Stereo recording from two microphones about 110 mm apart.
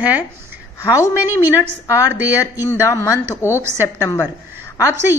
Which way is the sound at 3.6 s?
20° right (ahead or behind).